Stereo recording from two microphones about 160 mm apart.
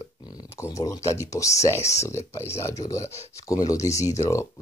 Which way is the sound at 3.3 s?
20° left (ahead or behind).